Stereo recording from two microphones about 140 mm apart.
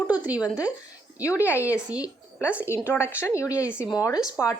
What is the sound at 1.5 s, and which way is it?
A woman's voice, 20° left (ahead or behind).